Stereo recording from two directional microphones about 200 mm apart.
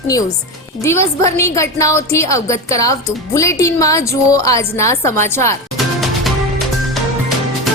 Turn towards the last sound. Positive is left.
turn(degrees=0)  # may be behind; listen again after turning